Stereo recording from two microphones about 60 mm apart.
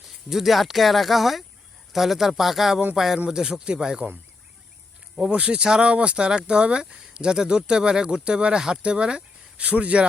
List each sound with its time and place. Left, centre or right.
0.0 s speech: centre
5.3 s speech: right
9.6 s speech: right